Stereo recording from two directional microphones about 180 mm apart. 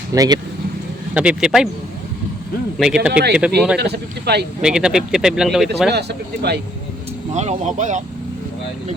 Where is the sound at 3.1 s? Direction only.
65° right (ahead or behind).